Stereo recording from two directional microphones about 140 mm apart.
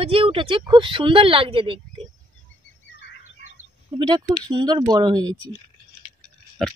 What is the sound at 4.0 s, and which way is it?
Speech, 35° right (ahead or behind).